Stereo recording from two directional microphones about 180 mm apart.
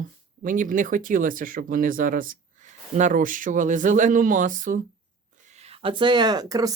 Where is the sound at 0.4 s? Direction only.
50° right (ahead or behind).